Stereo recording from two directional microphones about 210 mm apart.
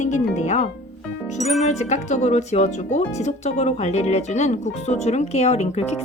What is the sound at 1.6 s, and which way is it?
Speech, 30° left (ahead or behind).